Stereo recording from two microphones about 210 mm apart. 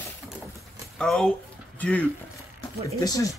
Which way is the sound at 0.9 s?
5° left (ahead or behind).